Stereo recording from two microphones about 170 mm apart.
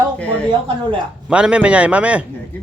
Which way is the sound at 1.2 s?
5° right (ahead or behind).